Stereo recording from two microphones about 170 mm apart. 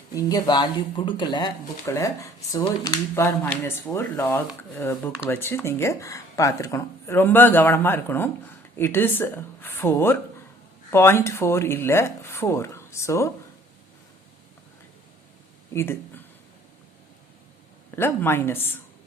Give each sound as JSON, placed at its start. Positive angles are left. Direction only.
{"t": 0.1, "sound": "speech", "side_deg": 20}
{"t": 15.7, "sound": "speech", "side_deg": 15}
{"t": 17.9, "sound": "speech", "side_deg": 15}